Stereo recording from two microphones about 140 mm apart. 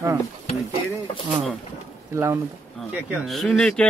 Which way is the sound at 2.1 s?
20° right (ahead or behind).